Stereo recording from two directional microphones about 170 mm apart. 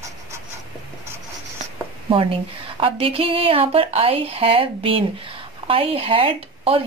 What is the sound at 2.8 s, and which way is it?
A woman's voice, 30° right (ahead or behind).